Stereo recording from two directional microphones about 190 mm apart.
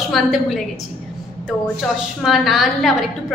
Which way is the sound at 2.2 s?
Centre (ahead or behind).